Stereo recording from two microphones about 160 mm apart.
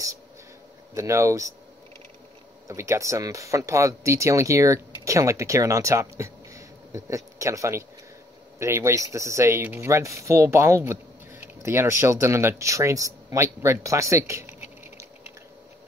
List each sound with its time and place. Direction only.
0.9 s speech: 20° right (ahead or behind)
2.7 s speech: 20° right (ahead or behind)